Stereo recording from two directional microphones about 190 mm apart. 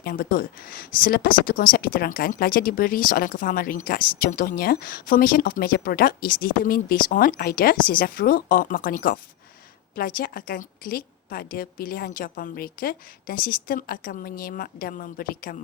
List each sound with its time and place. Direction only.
0.0 s speech: 50° left (ahead or behind)